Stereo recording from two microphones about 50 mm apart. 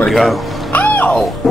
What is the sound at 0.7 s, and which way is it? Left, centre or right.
Music, left.